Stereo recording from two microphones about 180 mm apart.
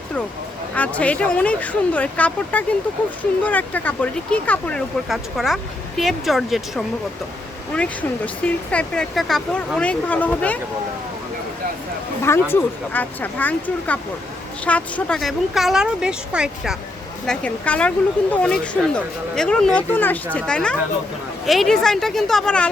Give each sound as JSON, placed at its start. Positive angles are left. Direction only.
{"t": 0.7, "sound": "speech", "side_deg": 10}
{"t": 12.2, "sound": "speech", "side_deg": 15}
{"t": 17.2, "sound": "speech", "side_deg": 5}